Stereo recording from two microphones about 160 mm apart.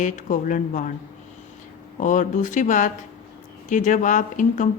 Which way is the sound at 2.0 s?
50° left (ahead or behind).